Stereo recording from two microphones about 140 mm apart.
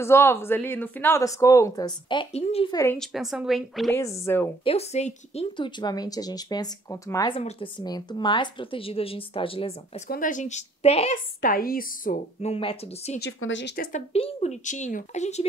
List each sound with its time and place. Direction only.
0.0 s speech: 20° left (ahead or behind)
2.3 s a woman's voice: 45° left (ahead or behind)
2.7 s speech: 20° left (ahead or behind)
3.0 s a woman's voice: centre (ahead or behind)
3.9 s speech: 20° left (ahead or behind)
4.6 s a woman's voice: 50° left (ahead or behind)
5.8 s speech: 30° left (ahead or behind)
9.9 s speech: 80° left; by 11.1 s 50° left (ahead or behind)
11.4 s speech: 90° left
12.4 s a woman's voice: 45° left (ahead or behind)
13.8 s speech: 90° left
14.1 s speech: 50° left (ahead or behind)